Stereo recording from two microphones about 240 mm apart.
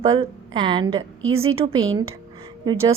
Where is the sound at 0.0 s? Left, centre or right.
Right.